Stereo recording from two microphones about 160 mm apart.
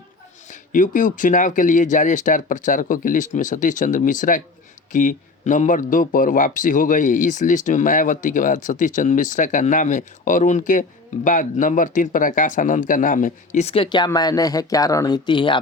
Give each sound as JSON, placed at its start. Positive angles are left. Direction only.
{"t": 0.4, "sound": "speech", "side_deg": 55}